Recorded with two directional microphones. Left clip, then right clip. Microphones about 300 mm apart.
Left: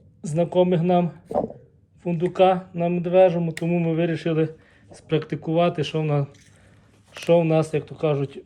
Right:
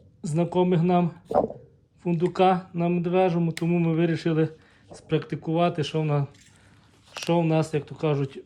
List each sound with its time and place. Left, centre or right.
0.3 s speech: centre
1.3 s speech: left
2.4 s speech: centre